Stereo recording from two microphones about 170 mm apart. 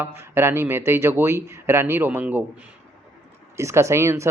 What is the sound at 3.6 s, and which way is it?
Speech, 15° right (ahead or behind).